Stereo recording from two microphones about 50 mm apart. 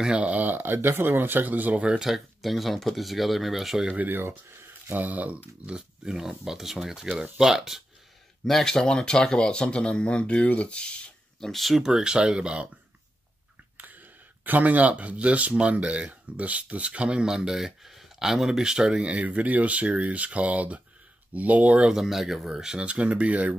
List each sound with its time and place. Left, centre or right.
0.1 s speech: right
0.7 s speech: right
1.8 s speech: centre
2.0 s speech: centre
3.8 s speech: right
4.1 s speech: right
4.9 s speech: right
5.7 s speech: centre
8.5 s speech: centre
11.4 s speech: centre; by 12.6 s right
13.7 s a sound: right
15.6 s speech: right
21.8 s speech: centre
22.8 s speech: right